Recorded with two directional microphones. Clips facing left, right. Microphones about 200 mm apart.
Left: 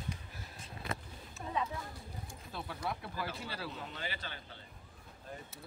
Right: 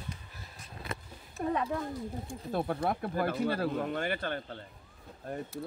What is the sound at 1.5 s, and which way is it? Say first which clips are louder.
Speech: right 7 dB; 55° right (ahead or behind).